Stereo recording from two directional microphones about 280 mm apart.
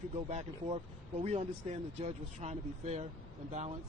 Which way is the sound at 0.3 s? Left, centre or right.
Right.